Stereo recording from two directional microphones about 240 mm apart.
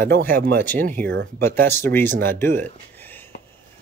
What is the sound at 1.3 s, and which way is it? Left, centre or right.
Speech, centre.